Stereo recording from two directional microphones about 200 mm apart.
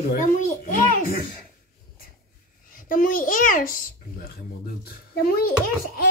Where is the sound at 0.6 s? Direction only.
40° left (ahead or behind).